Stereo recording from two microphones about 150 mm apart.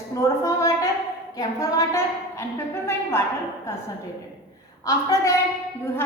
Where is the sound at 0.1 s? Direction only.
25° left (ahead or behind).